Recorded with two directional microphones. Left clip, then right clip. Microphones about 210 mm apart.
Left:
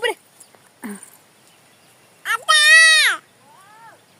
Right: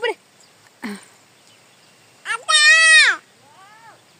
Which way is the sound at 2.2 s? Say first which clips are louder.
Even; 5° left (ahead or behind).